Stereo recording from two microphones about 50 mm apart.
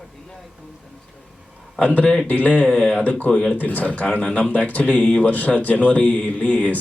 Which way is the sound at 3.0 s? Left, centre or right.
Left.